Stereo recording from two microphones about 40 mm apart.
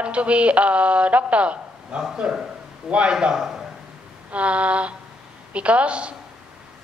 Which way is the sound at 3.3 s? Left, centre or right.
Centre.